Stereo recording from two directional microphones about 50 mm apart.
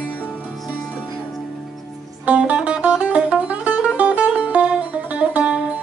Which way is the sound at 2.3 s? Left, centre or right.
Right.